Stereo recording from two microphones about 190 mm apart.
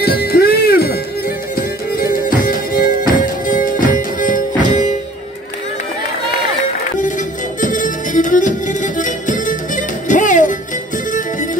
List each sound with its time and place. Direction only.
0.0 s music: 55° left (ahead or behind)
2.0 s music: 50° left (ahead or behind)
7.6 s music: 45° left (ahead or behind)